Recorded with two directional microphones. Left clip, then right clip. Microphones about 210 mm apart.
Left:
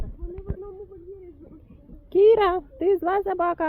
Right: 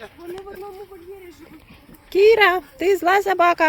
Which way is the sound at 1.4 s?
50° right (ahead or behind).